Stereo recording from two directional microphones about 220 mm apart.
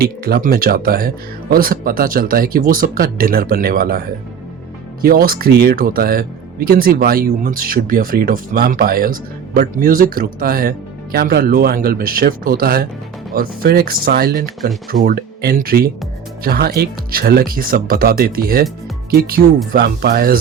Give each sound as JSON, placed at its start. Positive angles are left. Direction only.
{"t": 0.0, "sound": "speech", "side_deg": -45}
{"t": 5.0, "sound": "speech", "side_deg": -45}
{"t": 19.7, "sound": "speech", "side_deg": -45}